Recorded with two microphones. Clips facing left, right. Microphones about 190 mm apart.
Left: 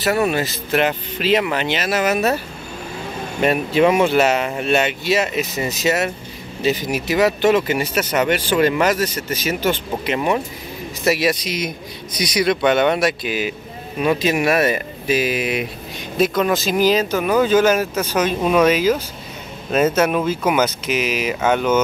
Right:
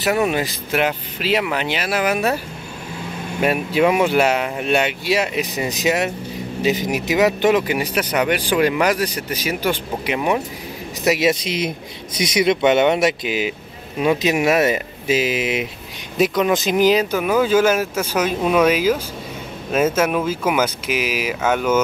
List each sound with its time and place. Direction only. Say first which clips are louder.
0.1 s speech: even; 15° right (ahead or behind)
11.1 s speech: right 1 dB; 20° right (ahead or behind); by 21.8 s 5° right (ahead or behind)